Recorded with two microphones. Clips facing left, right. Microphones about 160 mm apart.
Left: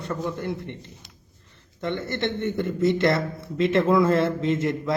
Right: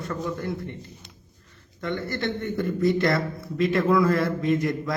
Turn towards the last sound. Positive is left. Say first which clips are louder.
# even
turn(degrees=20)  # may be behind; listen again after turning